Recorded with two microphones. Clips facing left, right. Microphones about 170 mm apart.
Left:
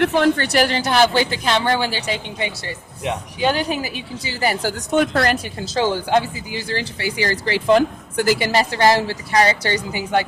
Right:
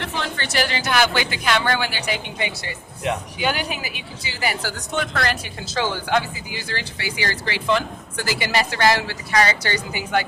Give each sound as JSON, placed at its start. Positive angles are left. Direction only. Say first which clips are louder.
{"t": 0.0, "sound": "a woman's voice", "louder": "left 12 dB", "side_deg": 55}
{"t": 0.4, "sound": "speech", "louder": "left 5 dB", "side_deg": 40}
{"t": 5.7, "sound": "speech", "louder": "left 4 dB", "side_deg": 35}